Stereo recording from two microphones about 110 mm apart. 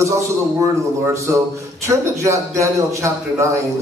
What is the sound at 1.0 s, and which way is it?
A man's voice, 30° right (ahead or behind).